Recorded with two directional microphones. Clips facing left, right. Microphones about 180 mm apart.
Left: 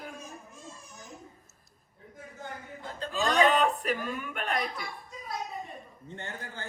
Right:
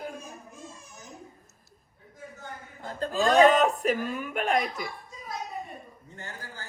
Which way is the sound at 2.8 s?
45° right (ahead or behind).